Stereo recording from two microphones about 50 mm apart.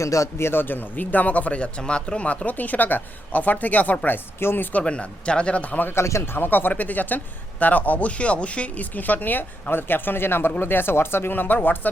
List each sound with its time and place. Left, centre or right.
0.0 s speech: left
4.0 s speech: left
4.8 s speech: left
5.9 s speech: left
6.3 s speech: left